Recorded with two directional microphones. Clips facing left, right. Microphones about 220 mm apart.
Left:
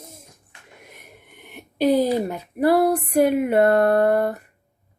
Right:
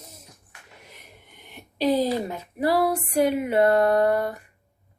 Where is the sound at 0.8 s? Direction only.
50° left (ahead or behind).